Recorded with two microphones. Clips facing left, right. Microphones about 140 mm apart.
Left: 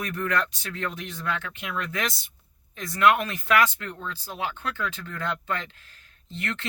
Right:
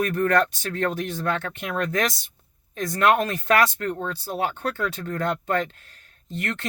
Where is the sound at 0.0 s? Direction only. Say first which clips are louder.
Right 7 dB; 50° right (ahead or behind).